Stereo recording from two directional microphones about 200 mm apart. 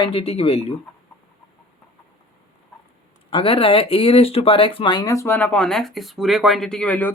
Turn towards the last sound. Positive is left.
turn(degrees=5)  # may be behind; listen again after turning